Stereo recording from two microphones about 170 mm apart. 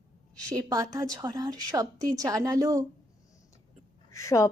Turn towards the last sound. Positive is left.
turn(degrees=20)  # may be behind; listen again after turning